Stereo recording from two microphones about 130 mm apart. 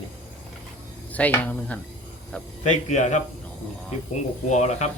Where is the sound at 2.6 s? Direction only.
65° left (ahead or behind).